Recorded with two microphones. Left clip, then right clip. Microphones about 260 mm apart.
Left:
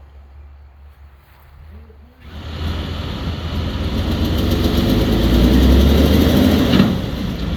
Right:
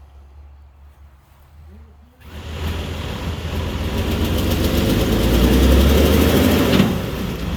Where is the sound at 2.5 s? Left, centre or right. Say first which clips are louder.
Left 1 dB; centre.